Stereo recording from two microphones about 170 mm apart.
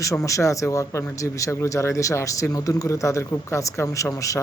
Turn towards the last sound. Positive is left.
turn(degrees=20)  # may be behind; listen again after turning